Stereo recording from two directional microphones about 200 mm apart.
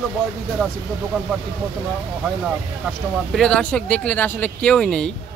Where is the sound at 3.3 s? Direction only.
5° left (ahead or behind).